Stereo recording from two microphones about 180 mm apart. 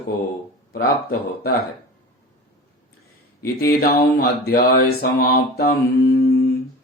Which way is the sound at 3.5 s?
60° left (ahead or behind).